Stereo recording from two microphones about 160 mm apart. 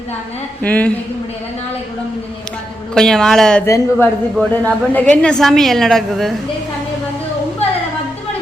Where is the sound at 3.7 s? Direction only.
20° left (ahead or behind); by 6.4 s centre (ahead or behind).